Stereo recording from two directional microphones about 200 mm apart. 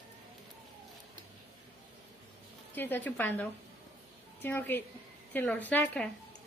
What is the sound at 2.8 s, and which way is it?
A woman's voice, 10° left (ahead or behind).